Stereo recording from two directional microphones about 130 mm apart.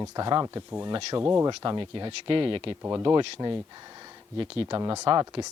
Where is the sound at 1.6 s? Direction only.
35° right (ahead or behind).